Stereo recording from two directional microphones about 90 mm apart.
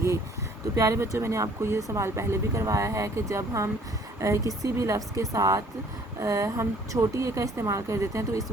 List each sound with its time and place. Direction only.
0.8 s speech: 40° right (ahead or behind)